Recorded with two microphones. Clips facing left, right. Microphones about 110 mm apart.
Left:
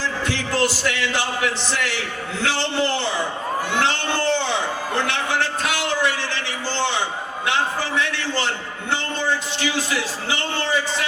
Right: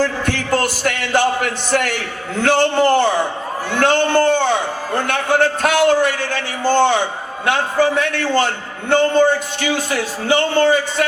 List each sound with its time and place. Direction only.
0.0 s a man's voice: 50° right (ahead or behind)